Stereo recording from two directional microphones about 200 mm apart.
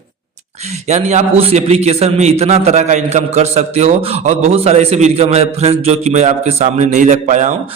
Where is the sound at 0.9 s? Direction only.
35° right (ahead or behind).